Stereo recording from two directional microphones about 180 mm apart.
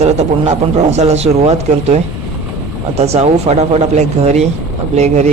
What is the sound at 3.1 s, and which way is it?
A man's voice, 35° right (ahead or behind).